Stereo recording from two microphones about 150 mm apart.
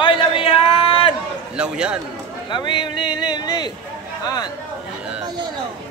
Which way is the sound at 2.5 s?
30° left (ahead or behind).